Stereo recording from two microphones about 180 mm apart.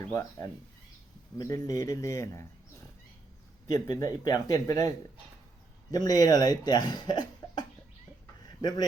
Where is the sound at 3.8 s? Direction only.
20° left (ahead or behind).